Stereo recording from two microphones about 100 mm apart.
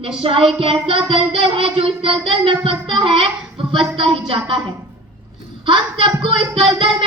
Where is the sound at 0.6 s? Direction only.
65° right (ahead or behind).